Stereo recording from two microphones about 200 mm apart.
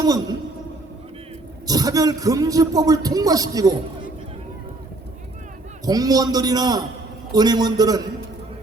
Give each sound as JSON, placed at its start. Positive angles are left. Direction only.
{"t": 0.0, "sound": "a man's voice", "side_deg": -20}
{"t": 1.6, "sound": "a man's voice", "side_deg": -20}
{"t": 5.8, "sound": "a man's voice", "side_deg": -20}